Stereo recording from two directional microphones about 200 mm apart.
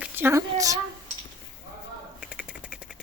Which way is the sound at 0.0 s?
10° right (ahead or behind).